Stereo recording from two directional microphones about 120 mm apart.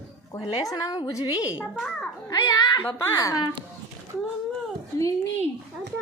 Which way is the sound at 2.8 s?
20° left (ahead or behind).